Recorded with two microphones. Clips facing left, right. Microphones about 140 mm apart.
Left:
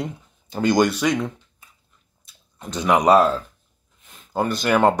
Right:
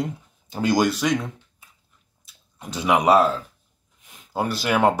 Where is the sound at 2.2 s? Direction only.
10° right (ahead or behind).